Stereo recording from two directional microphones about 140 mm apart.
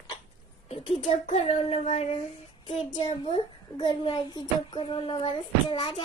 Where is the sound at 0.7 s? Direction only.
45° left (ahead or behind).